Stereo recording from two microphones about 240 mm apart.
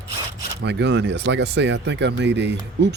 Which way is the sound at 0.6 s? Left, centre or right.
Right.